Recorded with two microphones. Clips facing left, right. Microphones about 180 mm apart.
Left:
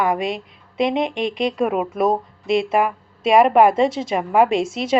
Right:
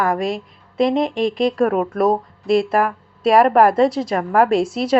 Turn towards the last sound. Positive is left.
turn(degrees=0)  # may be behind; listen again after turning